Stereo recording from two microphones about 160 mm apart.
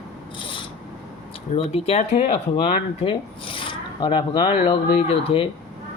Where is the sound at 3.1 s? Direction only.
30° left (ahead or behind).